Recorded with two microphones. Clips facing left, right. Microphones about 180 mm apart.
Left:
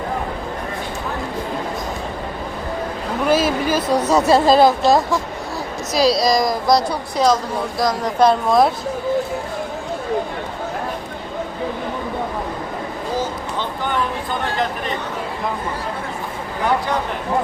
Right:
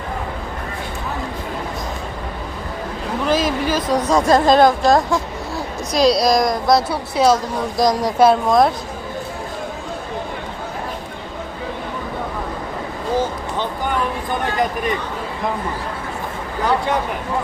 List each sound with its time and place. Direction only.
3.2 s a woman's voice: 10° left (ahead or behind)
7.8 s speech: 15° right (ahead or behind)
8.2 s a woman's voice: centre (ahead or behind)